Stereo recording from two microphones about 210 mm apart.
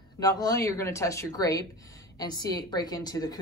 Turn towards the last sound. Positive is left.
turn(degrees=20)  # may be behind; listen again after turning